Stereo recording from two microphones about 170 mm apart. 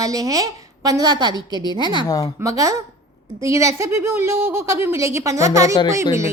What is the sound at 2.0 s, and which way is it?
Speech, 20° left (ahead or behind).